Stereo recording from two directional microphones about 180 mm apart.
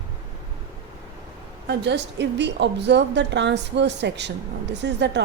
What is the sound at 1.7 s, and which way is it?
A woman's voice, 75° right (ahead or behind).